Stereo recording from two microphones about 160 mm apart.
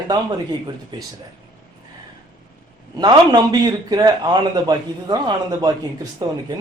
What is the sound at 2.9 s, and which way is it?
Speech, 25° right (ahead or behind).